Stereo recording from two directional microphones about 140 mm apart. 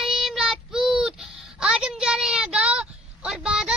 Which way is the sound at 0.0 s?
Centre (ahead or behind).